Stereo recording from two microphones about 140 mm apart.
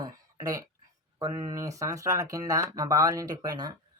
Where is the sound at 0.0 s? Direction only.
25° right (ahead or behind).